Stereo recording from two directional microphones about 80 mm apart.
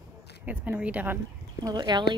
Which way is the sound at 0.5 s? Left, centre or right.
Centre.